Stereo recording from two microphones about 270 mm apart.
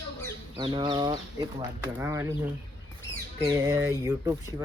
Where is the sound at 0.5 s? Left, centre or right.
Centre.